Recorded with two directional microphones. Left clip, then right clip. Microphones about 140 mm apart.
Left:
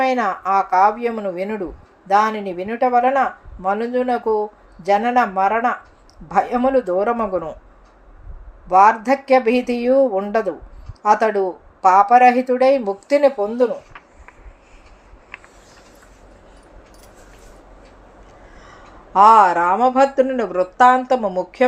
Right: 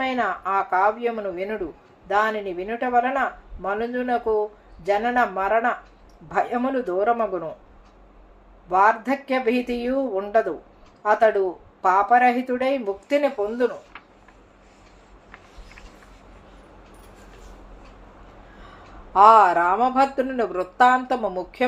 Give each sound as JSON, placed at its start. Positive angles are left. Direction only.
{"t": 0.0, "sound": "speech", "side_deg": 50}
{"t": 8.7, "sound": "speech", "side_deg": 50}
{"t": 19.1, "sound": "speech", "side_deg": 35}